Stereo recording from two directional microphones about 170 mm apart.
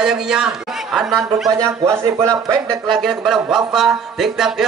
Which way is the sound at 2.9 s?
Centre (ahead or behind).